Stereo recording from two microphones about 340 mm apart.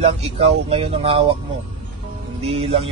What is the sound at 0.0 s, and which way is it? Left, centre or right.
Speech, centre.